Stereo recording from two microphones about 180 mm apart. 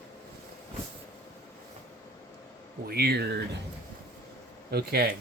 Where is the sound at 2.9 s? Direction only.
60° right (ahead or behind).